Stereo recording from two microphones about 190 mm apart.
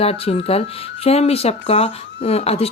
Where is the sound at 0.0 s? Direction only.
30° left (ahead or behind).